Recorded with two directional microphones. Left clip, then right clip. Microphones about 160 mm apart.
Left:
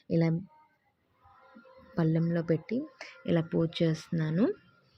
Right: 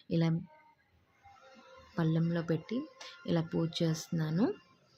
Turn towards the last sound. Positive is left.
turn(degrees=0)  # may be behind; listen again after turning